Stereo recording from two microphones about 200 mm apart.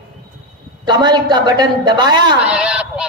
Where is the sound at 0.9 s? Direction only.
20° right (ahead or behind).